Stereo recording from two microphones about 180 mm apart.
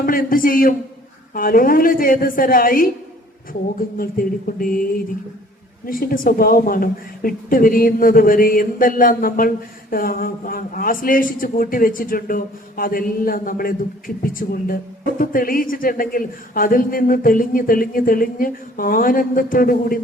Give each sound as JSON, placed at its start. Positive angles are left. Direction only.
{"t": 0.0, "sound": "speech", "side_deg": 50}
{"t": 5.8, "sound": "speech", "side_deg": 55}